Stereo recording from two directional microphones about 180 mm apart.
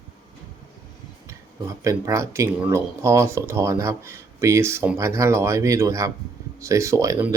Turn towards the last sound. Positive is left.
turn(degrees=-20)  # may be behind; listen again after turning